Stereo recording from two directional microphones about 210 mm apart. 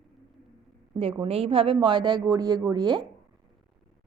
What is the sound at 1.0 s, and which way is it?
Speech, 25° right (ahead or behind).